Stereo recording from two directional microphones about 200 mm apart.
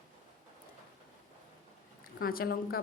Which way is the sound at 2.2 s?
45° left (ahead or behind).